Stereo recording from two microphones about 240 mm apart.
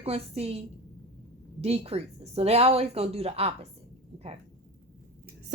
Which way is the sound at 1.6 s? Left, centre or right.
Right.